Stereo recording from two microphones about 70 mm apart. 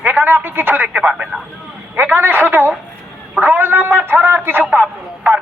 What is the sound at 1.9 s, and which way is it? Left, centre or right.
Speech, right.